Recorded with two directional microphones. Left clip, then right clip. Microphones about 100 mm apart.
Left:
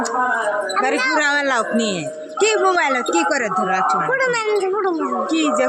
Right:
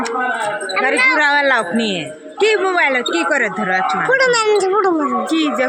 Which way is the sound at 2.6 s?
30° left (ahead or behind).